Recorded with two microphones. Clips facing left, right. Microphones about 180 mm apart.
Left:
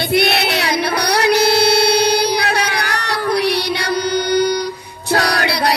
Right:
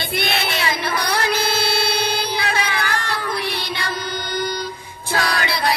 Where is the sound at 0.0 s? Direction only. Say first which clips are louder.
Left 8 dB; 70° left (ahead or behind).